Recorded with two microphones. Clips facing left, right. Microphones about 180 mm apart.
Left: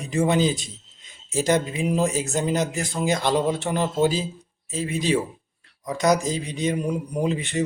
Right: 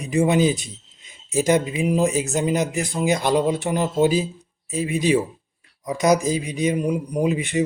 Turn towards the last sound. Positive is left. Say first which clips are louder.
# right 3 dB
turn(degrees=-15)  # may be behind; listen again after turning